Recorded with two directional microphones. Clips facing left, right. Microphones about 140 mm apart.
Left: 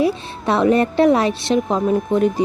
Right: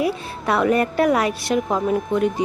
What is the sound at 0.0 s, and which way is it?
A woman's voice, 25° left (ahead or behind).